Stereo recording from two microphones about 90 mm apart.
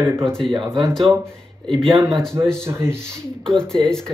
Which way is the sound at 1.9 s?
45° right (ahead or behind).